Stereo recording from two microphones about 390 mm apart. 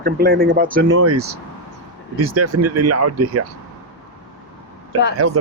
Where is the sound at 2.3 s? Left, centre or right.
Right.